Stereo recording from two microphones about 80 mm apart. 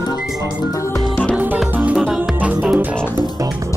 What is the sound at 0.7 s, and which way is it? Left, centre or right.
Music, left.